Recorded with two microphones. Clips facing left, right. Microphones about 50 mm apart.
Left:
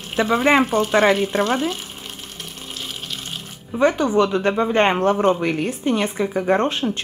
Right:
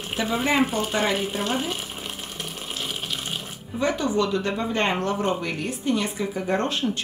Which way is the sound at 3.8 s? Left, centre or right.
Left.